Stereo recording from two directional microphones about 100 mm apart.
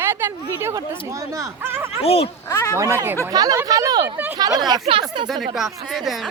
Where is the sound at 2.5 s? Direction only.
25° left (ahead or behind).